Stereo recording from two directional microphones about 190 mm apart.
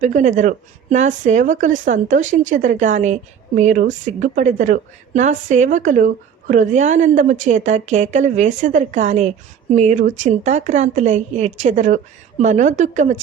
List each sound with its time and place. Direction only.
0.0 s a woman's voice: 40° right (ahead or behind)